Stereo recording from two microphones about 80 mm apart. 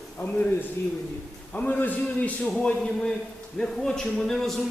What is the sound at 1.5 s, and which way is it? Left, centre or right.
A man's voice, centre.